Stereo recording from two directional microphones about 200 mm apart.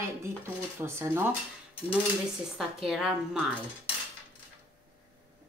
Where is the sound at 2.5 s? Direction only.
Centre (ahead or behind).